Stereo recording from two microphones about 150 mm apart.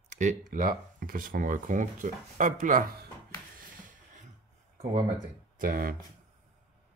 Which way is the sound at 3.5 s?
65° right (ahead or behind).